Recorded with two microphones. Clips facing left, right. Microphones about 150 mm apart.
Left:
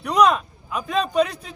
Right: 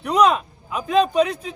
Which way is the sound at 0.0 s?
5° right (ahead or behind).